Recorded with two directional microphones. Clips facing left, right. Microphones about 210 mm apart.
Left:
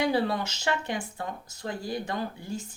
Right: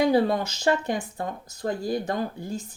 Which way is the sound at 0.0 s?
40° right (ahead or behind).